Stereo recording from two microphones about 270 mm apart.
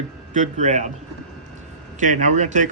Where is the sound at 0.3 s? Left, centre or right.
Right.